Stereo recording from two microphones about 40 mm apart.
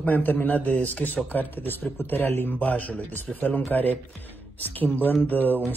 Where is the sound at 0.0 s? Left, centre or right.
Left.